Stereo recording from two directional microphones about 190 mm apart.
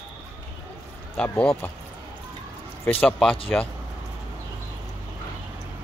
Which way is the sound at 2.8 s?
5° left (ahead or behind).